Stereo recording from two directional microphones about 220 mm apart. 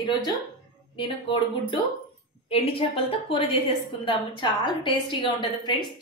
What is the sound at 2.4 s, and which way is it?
A woman's voice, 25° left (ahead or behind).